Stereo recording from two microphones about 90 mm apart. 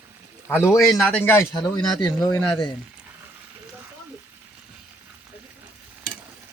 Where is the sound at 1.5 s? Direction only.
50° left (ahead or behind).